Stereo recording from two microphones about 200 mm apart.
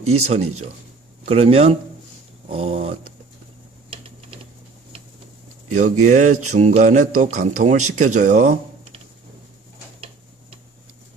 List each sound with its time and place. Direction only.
0.0 s speech: 90° right
1.2 s speech: 30° right (ahead or behind)
2.5 s a sound: 30° right (ahead or behind)
5.7 s speech: 35° right (ahead or behind)
6.0 s a sound: 35° right (ahead or behind)
7.9 s speech: 35° right (ahead or behind)
9.9 s tick-tock: 25° right (ahead or behind)